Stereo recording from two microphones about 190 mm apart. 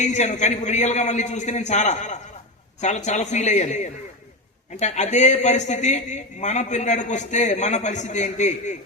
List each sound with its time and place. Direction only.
0.0 s a man's voice: 40° left (ahead or behind)
4.8 s a man's voice: 35° left (ahead or behind)